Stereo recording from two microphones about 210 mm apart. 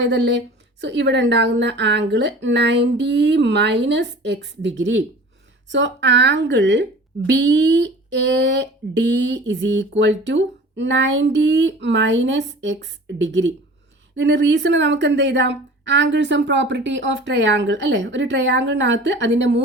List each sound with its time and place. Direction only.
0.0 s a woman's voice: 55° right (ahead or behind)